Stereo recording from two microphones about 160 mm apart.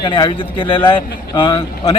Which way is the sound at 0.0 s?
30° left (ahead or behind).